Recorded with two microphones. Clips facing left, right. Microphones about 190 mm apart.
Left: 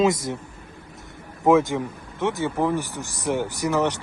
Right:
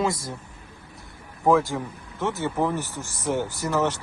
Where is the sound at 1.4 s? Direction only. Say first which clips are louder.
Left 3 dB; 20° left (ahead or behind).